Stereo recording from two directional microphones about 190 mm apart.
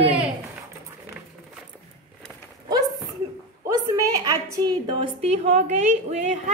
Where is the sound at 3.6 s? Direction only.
15° right (ahead or behind); by 6.5 s 40° right (ahead or behind).